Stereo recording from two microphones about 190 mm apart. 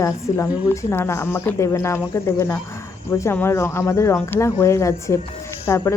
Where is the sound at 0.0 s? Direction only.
15° left (ahead or behind).